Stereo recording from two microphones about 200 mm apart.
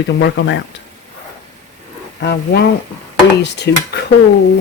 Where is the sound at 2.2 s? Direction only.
55° left (ahead or behind).